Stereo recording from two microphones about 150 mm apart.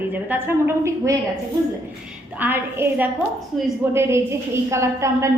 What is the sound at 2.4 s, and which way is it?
A woman's voice, 10° right (ahead or behind).